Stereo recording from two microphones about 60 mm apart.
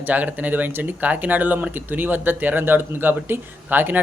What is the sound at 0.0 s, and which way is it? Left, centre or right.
Speech, right.